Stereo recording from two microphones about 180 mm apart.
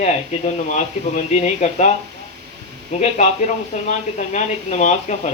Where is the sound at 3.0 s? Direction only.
40° left (ahead or behind).